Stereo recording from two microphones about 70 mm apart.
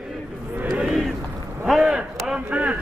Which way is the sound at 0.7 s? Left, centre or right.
Centre.